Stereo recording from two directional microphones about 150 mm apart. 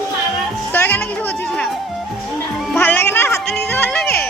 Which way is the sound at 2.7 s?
15° left (ahead or behind).